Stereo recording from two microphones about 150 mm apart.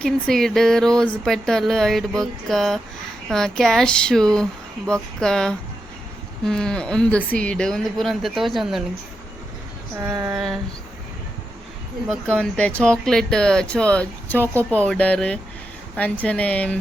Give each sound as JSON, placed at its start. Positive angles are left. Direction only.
{"t": 0.0, "sound": "speech", "side_deg": 5}
{"t": 10.0, "sound": "a sound", "side_deg": -20}
{"t": 10.3, "sound": "speech", "side_deg": -5}
{"t": 12.0, "sound": "speech", "side_deg": 5}